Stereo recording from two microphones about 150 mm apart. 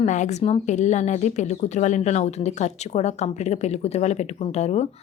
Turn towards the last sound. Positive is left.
turn(degrees=50)  # may be behind; listen again after turning